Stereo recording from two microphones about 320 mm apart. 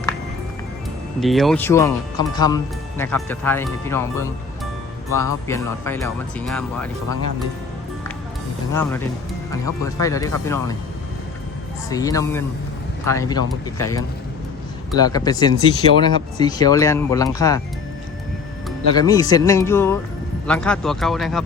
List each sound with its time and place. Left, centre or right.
1.2 s speech: centre
8.7 s speech: centre
11.9 s speech: centre
18.9 s speech: centre